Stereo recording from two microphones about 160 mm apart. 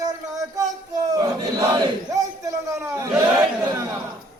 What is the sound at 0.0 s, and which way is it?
Battle cry, 20° right (ahead or behind).